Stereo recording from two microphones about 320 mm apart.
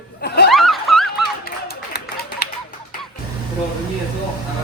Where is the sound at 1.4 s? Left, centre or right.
Left.